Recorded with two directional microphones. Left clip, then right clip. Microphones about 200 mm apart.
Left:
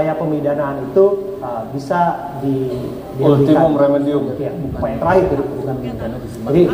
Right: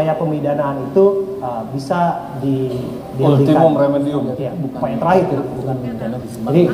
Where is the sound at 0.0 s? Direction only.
30° right (ahead or behind).